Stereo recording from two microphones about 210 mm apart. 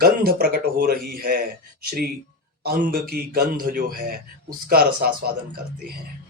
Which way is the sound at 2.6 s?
45° right (ahead or behind).